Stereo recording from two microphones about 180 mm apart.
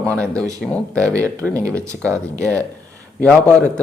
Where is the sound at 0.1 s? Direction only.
5° left (ahead or behind).